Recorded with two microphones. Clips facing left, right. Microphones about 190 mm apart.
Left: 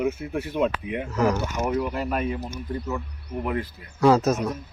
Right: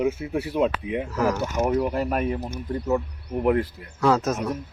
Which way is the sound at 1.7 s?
40° right (ahead or behind).